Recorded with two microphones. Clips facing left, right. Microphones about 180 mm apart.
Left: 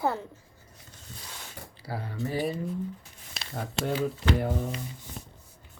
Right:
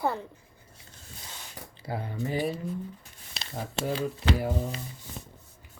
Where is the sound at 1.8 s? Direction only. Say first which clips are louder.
Right 1 dB; 20° right (ahead or behind).